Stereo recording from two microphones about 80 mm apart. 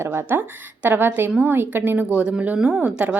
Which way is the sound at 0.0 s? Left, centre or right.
Right.